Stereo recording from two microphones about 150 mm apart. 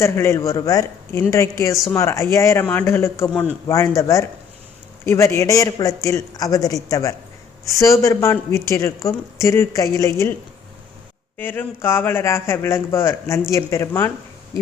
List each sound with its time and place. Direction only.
0.0 s a man's voice: 15° left (ahead or behind)
11.3 s a man's voice: 10° left (ahead or behind)